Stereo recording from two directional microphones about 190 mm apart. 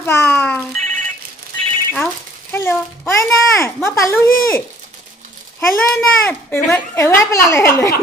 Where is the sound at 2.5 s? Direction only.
10° left (ahead or behind).